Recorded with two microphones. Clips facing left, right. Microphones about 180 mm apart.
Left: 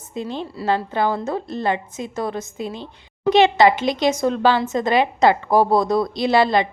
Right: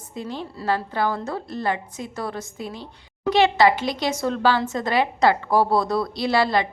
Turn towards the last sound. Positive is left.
turn(degrees=20)  # may be behind; listen again after turning